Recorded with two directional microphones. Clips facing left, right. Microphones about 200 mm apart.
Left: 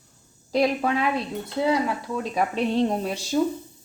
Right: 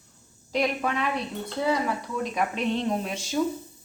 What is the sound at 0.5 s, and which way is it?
Speech, 35° left (ahead or behind).